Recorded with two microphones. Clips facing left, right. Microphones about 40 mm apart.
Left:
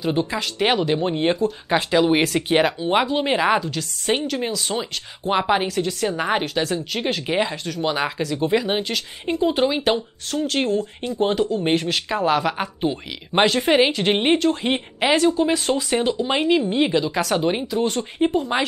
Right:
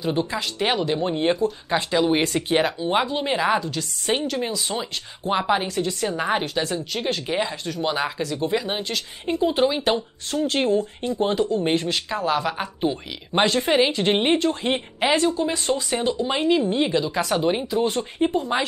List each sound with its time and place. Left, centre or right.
0.0 s a woman's voice: centre
5.3 s speech: centre
5.8 s a woman's voice: centre
6.0 s speech: centre
6.4 s a woman's voice: centre
7.6 s a woman's voice: centre
10.3 s speech: centre
11.1 s a woman's voice: centre
17.6 s a woman's voice: centre
18.5 s speech: centre